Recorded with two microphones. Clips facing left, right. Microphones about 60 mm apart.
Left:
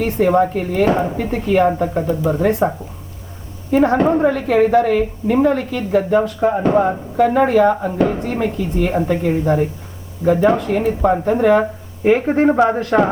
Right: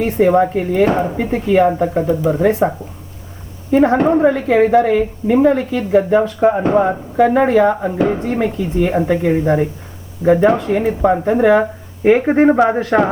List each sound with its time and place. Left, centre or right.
0.3 s a woman's voice: centre
6.7 s speech: centre
7.9 s speech: right
9.2 s speech: right
10.5 s speech: centre